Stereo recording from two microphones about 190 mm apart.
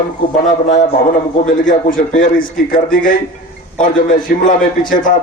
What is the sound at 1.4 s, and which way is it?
A man's voice, 45° left (ahead or behind).